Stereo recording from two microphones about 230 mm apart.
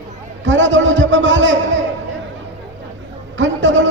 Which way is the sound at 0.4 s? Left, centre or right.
Right.